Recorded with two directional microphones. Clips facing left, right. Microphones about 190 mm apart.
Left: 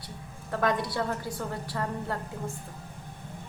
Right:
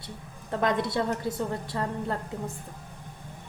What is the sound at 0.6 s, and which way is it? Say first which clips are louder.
A woman's voice: right 2 dB; 20° right (ahead or behind).